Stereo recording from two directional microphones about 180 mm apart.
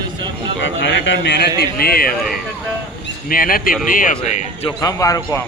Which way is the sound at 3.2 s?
50° left (ahead or behind).